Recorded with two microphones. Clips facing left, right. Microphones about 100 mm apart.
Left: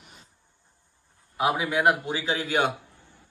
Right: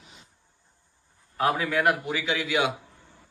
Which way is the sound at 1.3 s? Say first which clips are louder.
Even; 15° left (ahead or behind).